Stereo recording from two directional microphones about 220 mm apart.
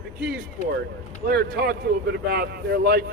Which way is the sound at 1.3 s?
45° right (ahead or behind).